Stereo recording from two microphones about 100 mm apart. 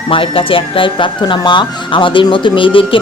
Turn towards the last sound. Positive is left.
turn(degrees=60)  # may be behind; listen again after turning